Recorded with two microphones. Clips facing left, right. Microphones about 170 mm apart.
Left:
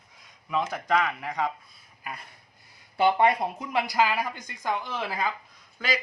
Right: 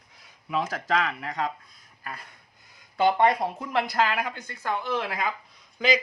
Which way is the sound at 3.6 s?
10° left (ahead or behind).